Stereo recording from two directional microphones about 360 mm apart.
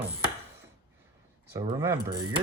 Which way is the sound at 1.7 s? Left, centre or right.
Centre.